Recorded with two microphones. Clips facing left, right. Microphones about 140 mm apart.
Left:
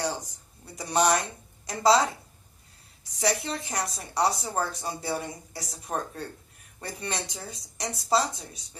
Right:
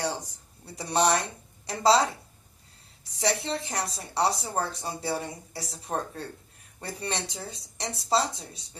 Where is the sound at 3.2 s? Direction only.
30° right (ahead or behind).